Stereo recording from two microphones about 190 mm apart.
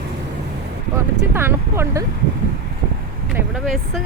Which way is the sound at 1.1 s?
15° right (ahead or behind).